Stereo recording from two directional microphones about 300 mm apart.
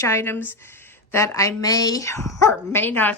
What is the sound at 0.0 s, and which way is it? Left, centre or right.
Speech, centre.